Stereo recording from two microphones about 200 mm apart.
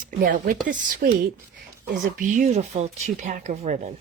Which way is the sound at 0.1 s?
45° right (ahead or behind).